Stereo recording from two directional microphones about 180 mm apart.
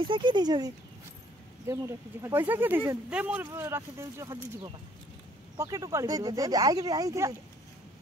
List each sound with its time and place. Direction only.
0.0 s speech: 25° right (ahead or behind)
1.7 s speech: 15° right (ahead or behind)
5.6 s speech: 15° right (ahead or behind)